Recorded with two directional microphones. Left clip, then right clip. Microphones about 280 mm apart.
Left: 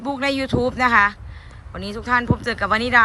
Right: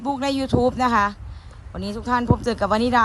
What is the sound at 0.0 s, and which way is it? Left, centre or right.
Speech, centre.